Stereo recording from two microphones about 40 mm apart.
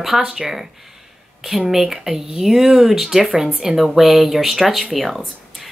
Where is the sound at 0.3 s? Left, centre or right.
Centre.